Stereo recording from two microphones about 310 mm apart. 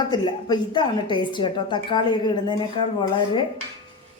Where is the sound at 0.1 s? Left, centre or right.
Centre.